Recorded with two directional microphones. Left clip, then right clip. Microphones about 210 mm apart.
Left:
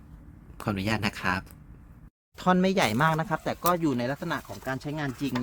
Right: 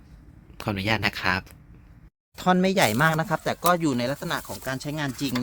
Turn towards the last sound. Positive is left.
turn(degrees=-50)  # may be behind; listen again after turning